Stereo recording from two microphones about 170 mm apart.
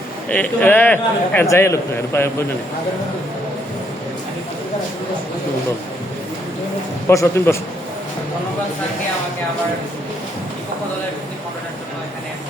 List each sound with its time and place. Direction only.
0.3 s a man's voice: 10° left (ahead or behind)
7.1 s a man's voice: 15° left (ahead or behind)